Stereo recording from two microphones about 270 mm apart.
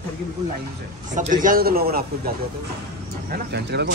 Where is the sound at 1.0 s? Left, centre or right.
Right.